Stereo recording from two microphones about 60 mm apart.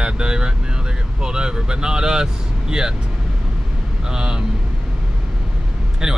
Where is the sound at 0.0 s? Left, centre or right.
Centre.